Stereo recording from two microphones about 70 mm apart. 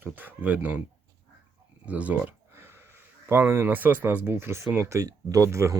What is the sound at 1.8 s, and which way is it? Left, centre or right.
Speech, centre.